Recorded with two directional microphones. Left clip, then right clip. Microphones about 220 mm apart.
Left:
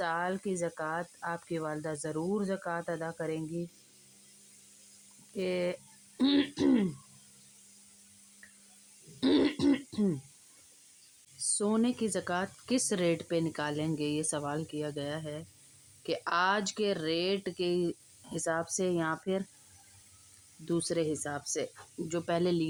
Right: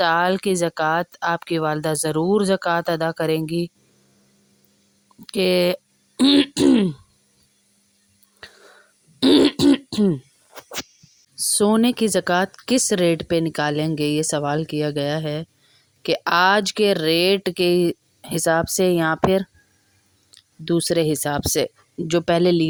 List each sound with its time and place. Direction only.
0.0 s speech: 45° right (ahead or behind)
5.3 s speech: 45° right (ahead or behind)
9.2 s beatboxing: 40° right (ahead or behind)
11.3 s a woman's voice: 40° right (ahead or behind)
20.7 s a woman's voice: 35° right (ahead or behind)